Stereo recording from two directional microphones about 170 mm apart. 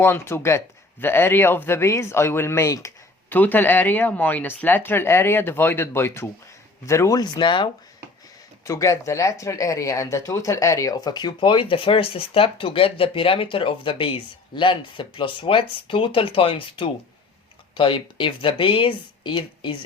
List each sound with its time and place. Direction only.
0.0 s speech: 15° left (ahead or behind)
8.6 s speech: 20° left (ahead or behind)